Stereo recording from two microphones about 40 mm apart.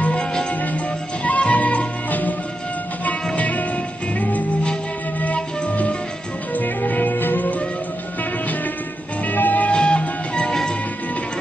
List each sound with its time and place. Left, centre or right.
0.1 s music: centre
1.2 s music: left
3.3 s music: left
6.5 s music: left
9.2 s music: left
9.7 s music: left